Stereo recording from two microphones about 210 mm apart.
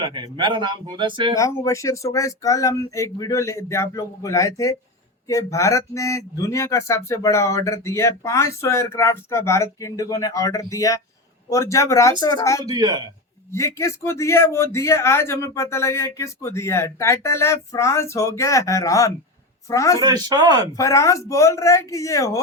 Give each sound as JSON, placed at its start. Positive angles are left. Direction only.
{"t": 0.0, "sound": "speech", "side_deg": -20}
{"t": 1.4, "sound": "speech", "side_deg": 15}
{"t": 12.6, "sound": "speech", "side_deg": -20}
{"t": 13.5, "sound": "speech", "side_deg": 15}
{"t": 20.0, "sound": "speech", "side_deg": -20}
{"t": 20.7, "sound": "speech", "side_deg": 15}